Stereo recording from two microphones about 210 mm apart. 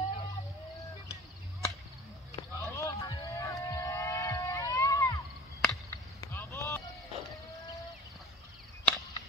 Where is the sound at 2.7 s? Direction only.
15° left (ahead or behind).